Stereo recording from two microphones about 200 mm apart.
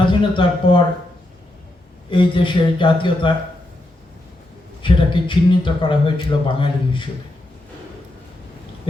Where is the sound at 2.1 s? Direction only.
25° left (ahead or behind).